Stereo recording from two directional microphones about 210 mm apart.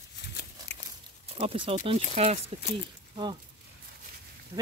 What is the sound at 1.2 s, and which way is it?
Speech, 25° right (ahead or behind).